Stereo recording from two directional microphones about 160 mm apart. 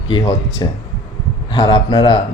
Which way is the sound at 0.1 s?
25° left (ahead or behind).